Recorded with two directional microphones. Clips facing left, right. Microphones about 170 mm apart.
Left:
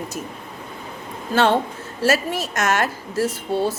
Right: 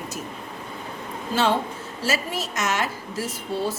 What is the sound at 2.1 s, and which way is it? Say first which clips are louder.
Speech: left 5 dB; 55° left (ahead or behind).